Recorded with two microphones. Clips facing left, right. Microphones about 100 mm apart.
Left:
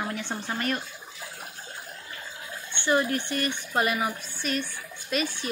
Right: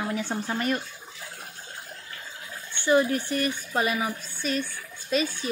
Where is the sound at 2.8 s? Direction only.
10° right (ahead or behind).